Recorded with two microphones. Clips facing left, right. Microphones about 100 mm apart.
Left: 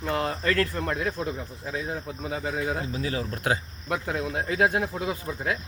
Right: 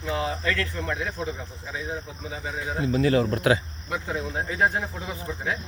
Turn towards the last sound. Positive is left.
turn(degrees=60)  # may be behind; listen again after turning